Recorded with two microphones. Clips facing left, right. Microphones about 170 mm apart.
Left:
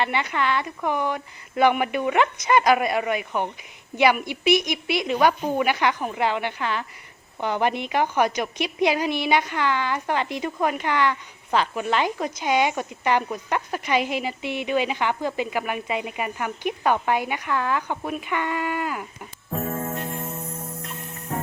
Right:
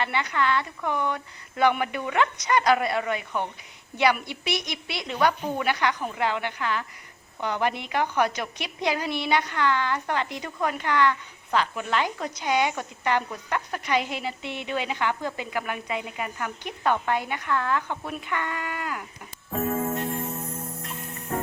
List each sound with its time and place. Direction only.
0.0 s a woman's voice: 20° left (ahead or behind)